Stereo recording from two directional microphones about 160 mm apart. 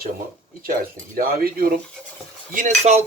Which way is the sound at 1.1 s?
65° right (ahead or behind).